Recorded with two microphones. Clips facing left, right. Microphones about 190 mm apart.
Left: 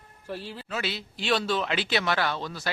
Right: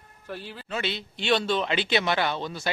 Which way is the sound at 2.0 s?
20° right (ahead or behind).